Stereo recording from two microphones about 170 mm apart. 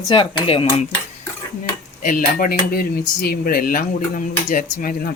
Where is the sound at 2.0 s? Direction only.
55° left (ahead or behind).